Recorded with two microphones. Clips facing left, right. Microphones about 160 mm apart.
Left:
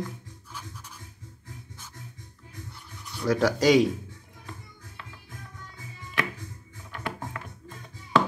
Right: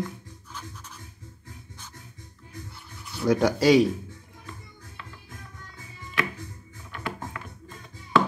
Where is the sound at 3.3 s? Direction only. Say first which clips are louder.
Right 2 dB; 15° right (ahead or behind).